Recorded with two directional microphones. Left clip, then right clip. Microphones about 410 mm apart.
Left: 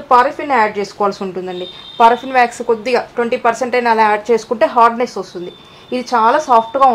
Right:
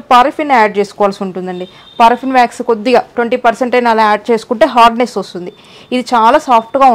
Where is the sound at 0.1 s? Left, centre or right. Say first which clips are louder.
Right 4 dB; right.